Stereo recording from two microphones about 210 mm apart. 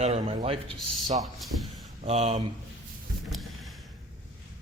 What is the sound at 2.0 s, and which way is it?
Speech, 30° right (ahead or behind).